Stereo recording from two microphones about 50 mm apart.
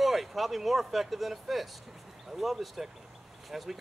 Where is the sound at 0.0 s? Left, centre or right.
Centre.